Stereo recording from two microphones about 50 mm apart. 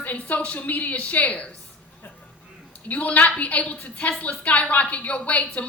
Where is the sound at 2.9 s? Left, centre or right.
Left.